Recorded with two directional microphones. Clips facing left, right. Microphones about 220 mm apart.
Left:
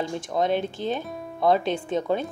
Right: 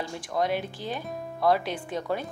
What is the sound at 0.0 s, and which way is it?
Speech, 20° left (ahead or behind).